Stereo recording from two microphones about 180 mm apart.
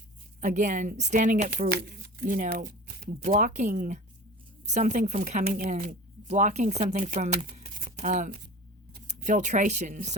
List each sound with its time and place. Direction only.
0.4 s speech: 45° right (ahead or behind)
7.9 s a sound: 40° right (ahead or behind)
9.0 s speech: 45° right (ahead or behind)